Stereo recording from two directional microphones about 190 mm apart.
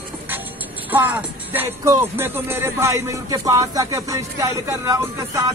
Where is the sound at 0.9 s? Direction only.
10° right (ahead or behind).